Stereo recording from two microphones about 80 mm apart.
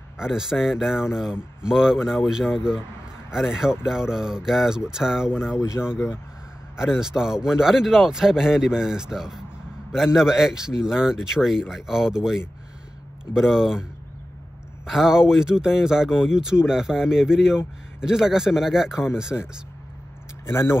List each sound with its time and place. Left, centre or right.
0.2 s speech: centre
5.6 s speech: left
6.9 s speech: centre
14.9 s speech: centre
20.4 s speech: left